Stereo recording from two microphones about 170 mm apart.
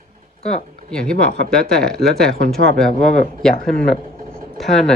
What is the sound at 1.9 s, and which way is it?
Speech, 70° right (ahead or behind).